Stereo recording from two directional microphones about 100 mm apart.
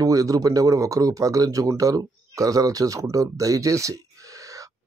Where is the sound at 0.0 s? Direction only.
35° right (ahead or behind).